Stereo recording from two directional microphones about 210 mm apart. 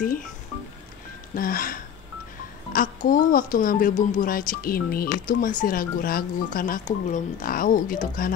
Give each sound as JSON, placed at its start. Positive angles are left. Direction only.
{"t": 1.3, "sound": "speech", "side_deg": 40}